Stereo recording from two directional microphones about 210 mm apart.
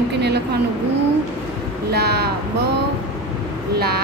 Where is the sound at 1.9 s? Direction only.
50° right (ahead or behind).